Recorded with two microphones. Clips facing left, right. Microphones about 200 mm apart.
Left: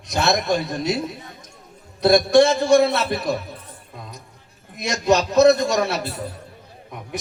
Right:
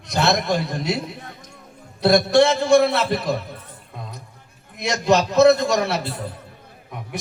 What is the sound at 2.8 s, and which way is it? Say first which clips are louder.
Speech: even; 20° left (ahead or behind).